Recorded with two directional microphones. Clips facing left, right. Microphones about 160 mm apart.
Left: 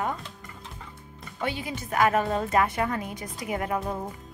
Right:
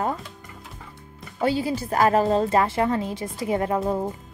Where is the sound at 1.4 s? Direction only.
35° right (ahead or behind).